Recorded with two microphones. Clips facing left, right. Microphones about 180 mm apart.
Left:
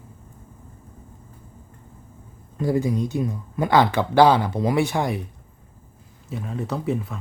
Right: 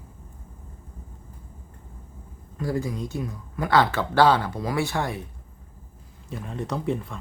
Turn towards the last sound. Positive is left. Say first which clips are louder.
# left 2 dB
turn(degrees=5)  # may be behind; listen again after turning